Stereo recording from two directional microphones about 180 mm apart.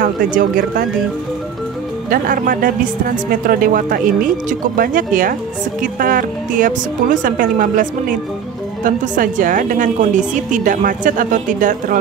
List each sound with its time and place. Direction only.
0.0 s speech: 50° right (ahead or behind)
2.0 s speech: 50° right (ahead or behind)